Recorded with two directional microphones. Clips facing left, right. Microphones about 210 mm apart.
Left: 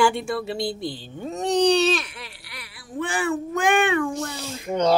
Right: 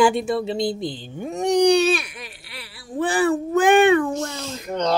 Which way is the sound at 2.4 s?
30° right (ahead or behind).